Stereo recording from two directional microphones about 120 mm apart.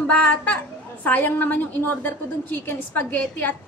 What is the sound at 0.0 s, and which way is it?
A woman's voice, 10° left (ahead or behind).